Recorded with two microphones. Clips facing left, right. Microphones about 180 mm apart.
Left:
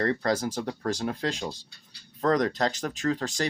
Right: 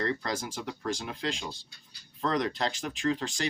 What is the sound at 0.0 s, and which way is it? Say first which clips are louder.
Speech: left 6 dB; 45° left (ahead or behind).